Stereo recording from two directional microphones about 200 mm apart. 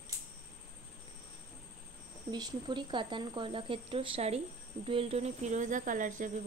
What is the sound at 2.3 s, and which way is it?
Speech, 20° right (ahead or behind).